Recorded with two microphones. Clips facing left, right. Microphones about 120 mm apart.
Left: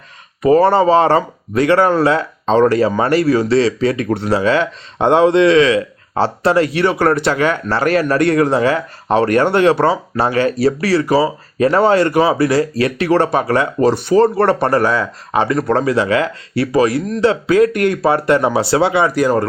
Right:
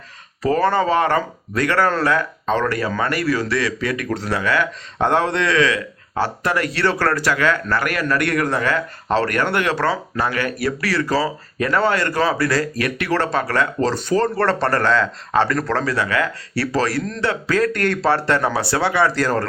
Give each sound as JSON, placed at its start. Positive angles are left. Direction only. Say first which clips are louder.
{"t": 0.6, "sound": "speech", "louder": "left 3 dB", "side_deg": 25}